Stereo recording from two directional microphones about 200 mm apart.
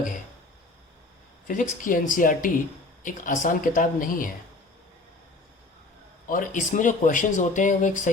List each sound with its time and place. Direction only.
1.5 s speech: 40° left (ahead or behind)
6.2 s speech: 45° left (ahead or behind)